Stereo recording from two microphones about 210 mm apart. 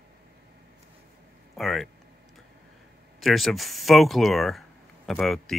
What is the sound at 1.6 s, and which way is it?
Speech, centre (ahead or behind).